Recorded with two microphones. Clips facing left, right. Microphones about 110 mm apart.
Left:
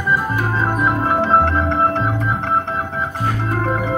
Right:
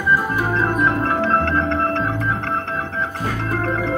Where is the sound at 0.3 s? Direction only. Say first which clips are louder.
Even; 10° left (ahead or behind).